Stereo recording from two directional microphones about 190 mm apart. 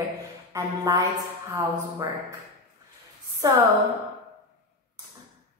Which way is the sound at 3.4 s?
20° right (ahead or behind).